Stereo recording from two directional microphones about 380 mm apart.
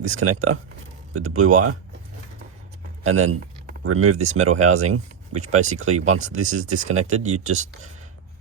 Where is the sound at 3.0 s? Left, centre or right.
Right.